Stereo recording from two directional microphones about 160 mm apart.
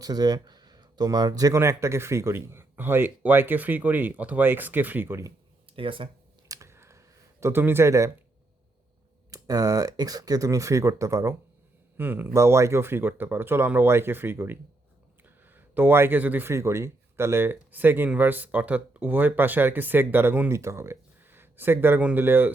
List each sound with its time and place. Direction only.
0.0 s a man's voice: 25° right (ahead or behind)
5.7 s speech: 35° right (ahead or behind)
6.5 s a sound: 15° right (ahead or behind)
9.3 s a man's voice: 25° right (ahead or behind)